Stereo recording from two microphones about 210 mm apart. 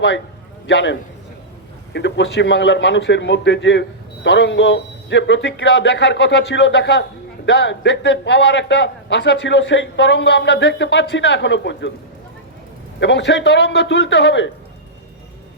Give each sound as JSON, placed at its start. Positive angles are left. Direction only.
{"t": 0.7, "sound": "a man's voice", "side_deg": 60}
{"t": 13.0, "sound": "a man's voice", "side_deg": 60}